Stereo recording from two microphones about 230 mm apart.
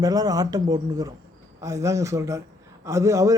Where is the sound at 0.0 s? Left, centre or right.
Centre.